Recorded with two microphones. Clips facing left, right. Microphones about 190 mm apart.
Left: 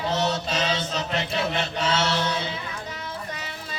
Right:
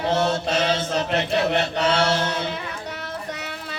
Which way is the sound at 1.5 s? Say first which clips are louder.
Right 5 dB; 60° right (ahead or behind).